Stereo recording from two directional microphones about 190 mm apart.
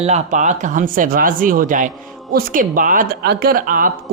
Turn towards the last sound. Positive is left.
turn(degrees=-45)  # may be behind; listen again after turning